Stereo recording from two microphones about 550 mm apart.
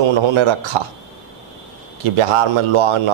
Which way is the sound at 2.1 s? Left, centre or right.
Right.